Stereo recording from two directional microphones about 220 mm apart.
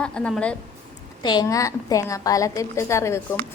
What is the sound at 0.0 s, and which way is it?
Speech, 5° left (ahead or behind).